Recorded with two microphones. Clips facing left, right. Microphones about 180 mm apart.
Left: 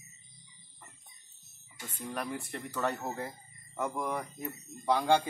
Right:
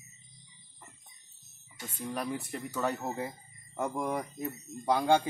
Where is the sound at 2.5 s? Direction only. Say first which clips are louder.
Right 1 dB; 10° right (ahead or behind).